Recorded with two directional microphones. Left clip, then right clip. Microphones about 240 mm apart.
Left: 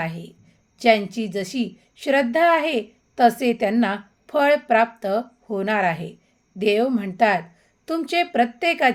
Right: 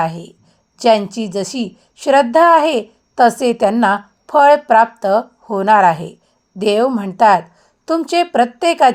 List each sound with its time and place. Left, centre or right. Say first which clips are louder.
0.0 s a woman's voice: right 10 dB; centre